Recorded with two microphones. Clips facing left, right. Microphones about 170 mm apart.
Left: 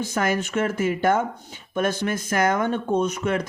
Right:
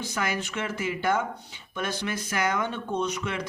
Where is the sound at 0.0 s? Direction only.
50° left (ahead or behind).